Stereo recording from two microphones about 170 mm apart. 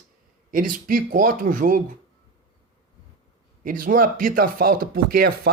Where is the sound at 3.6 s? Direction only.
55° right (ahead or behind).